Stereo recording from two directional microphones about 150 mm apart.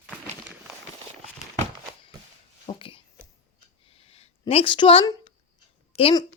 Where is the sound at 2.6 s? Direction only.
35° left (ahead or behind).